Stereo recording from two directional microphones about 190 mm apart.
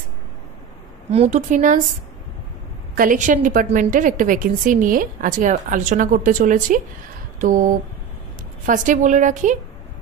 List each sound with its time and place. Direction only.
1.1 s a woman's voice: 35° right (ahead or behind)
3.0 s a woman's voice: 40° right (ahead or behind)
7.3 s a sound: 45° right (ahead or behind)
8.6 s a woman's voice: 40° right (ahead or behind)